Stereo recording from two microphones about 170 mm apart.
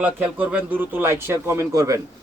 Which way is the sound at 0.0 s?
10° right (ahead or behind).